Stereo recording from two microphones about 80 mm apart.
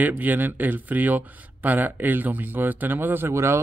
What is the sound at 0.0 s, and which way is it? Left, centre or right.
Speech, right.